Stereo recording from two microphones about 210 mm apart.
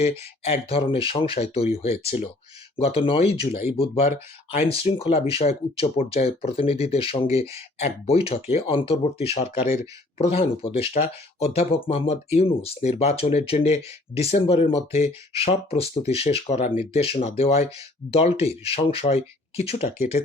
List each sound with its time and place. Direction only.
0.0 s speech: 30° left (ahead or behind)